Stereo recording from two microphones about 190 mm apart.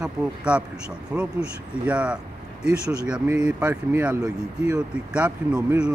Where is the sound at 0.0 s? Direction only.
5° right (ahead or behind).